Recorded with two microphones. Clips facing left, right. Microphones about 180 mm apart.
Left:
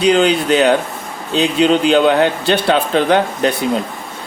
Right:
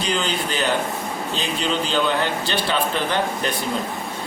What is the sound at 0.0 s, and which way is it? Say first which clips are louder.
Speech: left 11 dB; 70° left (ahead or behind).